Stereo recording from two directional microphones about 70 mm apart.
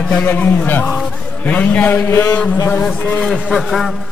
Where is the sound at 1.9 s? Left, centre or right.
Left.